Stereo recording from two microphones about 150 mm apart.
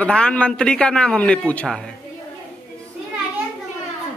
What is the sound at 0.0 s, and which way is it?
A man's voice, 5° left (ahead or behind).